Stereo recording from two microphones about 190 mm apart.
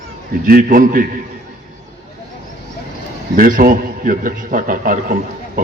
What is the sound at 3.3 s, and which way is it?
A man's voice, 45° right (ahead or behind).